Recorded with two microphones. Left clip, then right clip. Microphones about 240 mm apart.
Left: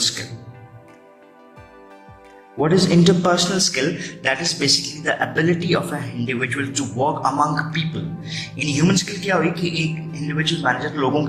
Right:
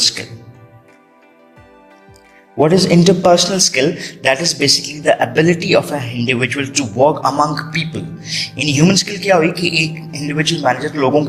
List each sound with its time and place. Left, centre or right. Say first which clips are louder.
2.6 s speech: right 5 dB; right
4.8 s a man's voice: right 3 dB; centre
5.0 s speech: right 9 dB; right